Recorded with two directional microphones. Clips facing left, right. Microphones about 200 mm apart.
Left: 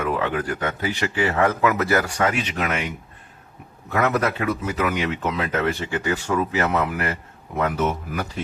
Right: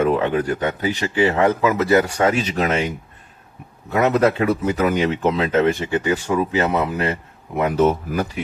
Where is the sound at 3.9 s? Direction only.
20° right (ahead or behind).